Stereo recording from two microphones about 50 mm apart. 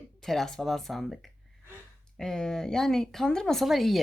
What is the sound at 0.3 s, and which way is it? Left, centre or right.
A woman's voice, centre.